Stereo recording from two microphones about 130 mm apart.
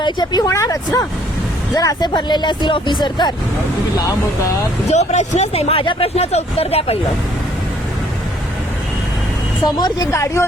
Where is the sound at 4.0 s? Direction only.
25° left (ahead or behind).